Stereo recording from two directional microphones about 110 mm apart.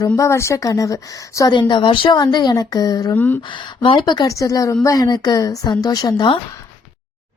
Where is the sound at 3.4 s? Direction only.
45° left (ahead or behind).